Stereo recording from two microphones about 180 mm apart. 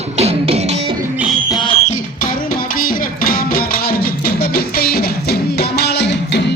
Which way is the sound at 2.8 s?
50° left (ahead or behind).